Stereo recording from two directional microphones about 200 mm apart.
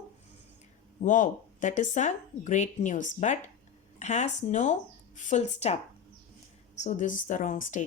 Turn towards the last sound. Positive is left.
turn(degrees=40)  # may be behind; listen again after turning